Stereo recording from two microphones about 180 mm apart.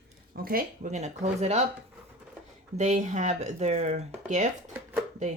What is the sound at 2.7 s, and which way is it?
Speech, 40° right (ahead or behind).